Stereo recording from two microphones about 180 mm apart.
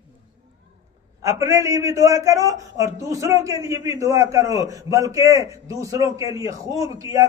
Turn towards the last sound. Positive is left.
turn(degrees=-20)  # may be behind; listen again after turning